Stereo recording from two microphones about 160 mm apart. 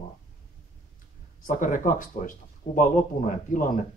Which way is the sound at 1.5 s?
55° left (ahead or behind).